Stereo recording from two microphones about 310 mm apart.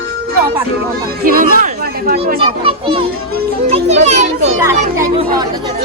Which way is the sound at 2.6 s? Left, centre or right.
Centre.